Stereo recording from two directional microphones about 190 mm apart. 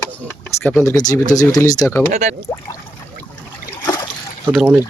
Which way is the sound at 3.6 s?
20° left (ahead or behind).